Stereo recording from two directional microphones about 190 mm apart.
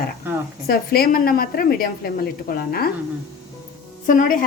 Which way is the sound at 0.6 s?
55° left (ahead or behind).